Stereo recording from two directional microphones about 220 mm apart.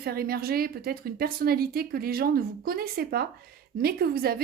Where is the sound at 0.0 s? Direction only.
45° right (ahead or behind).